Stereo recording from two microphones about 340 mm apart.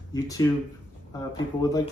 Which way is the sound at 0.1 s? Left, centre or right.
Centre.